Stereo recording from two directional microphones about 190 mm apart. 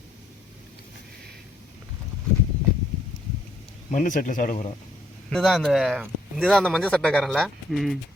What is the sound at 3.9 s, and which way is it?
Speech, 45° left (ahead or behind).